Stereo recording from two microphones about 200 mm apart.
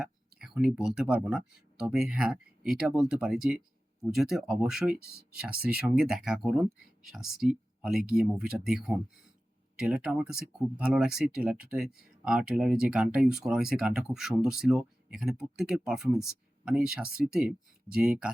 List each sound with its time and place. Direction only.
0.0 s speech: 5° right (ahead or behind)
4.9 s speech: 50° right (ahead or behind)
5.4 s speech: 5° right (ahead or behind)